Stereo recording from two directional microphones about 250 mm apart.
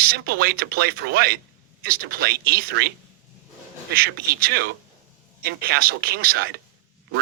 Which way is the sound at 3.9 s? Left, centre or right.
Right.